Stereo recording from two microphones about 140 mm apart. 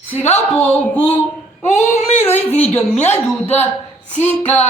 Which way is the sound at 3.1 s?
15° left (ahead or behind).